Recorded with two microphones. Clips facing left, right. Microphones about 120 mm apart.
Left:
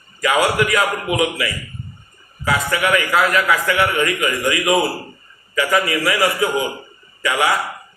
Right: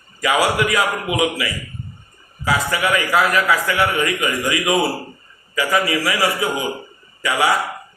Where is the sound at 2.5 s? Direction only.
20° right (ahead or behind).